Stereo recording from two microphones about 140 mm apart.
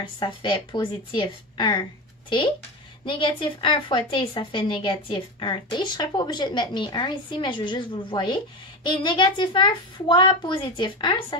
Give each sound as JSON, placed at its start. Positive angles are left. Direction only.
{"t": 0.2, "sound": "a woman's voice", "side_deg": 35}